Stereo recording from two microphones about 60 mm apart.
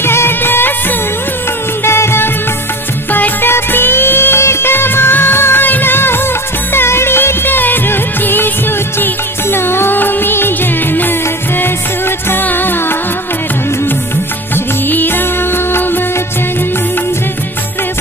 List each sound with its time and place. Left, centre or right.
0.0 s music of bollywood: left
1.9 s music: left
3.1 s music: left
12.3 s music: left
14.9 s music: left